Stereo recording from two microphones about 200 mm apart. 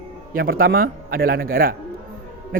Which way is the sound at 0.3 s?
45° right (ahead or behind).